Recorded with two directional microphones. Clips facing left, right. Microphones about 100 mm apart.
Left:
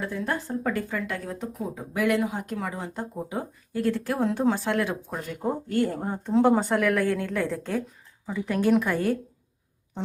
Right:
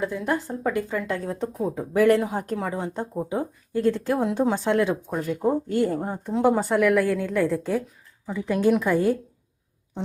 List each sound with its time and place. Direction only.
0.0 s speech: 20° right (ahead or behind)
5.1 s speech: 10° right (ahead or behind)
5.6 s speech: 20° right (ahead or behind)
5.9 s a woman's voice: 5° right (ahead or behind)
8.8 s speech: 15° right (ahead or behind)